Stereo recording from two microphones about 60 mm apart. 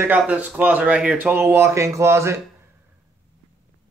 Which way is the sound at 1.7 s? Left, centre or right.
Right.